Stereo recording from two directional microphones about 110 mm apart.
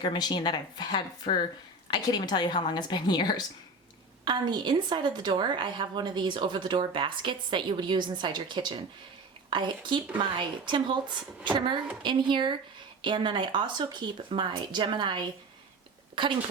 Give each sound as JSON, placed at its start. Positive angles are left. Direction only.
{"t": 0.0, "sound": "speech", "side_deg": 40}
{"t": 4.3, "sound": "a woman's voice", "side_deg": -45}